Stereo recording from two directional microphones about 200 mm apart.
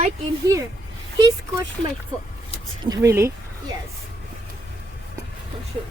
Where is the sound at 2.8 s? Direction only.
15° right (ahead or behind).